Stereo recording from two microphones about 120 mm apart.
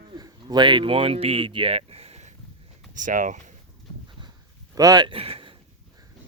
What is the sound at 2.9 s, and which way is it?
Speech, 90° right.